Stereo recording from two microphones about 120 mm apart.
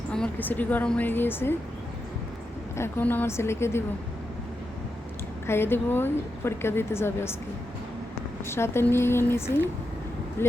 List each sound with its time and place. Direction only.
0.1 s a woman's voice: 10° left (ahead or behind)
2.7 s speech: 20° left (ahead or behind)
5.5 s speech: 20° left (ahead or behind)
8.4 s speech: 20° left (ahead or behind)